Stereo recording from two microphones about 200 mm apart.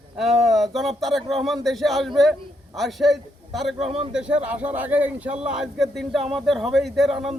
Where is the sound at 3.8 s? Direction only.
30° right (ahead or behind).